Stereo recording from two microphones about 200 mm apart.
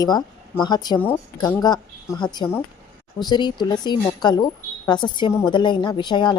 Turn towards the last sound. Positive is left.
turn(degrees=20)  # may be behind; listen again after turning